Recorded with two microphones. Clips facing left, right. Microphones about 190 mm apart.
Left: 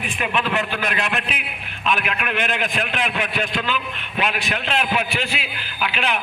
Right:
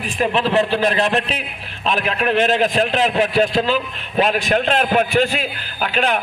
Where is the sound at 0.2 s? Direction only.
35° right (ahead or behind).